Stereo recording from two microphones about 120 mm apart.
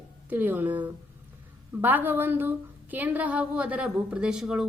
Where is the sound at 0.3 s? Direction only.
15° right (ahead or behind).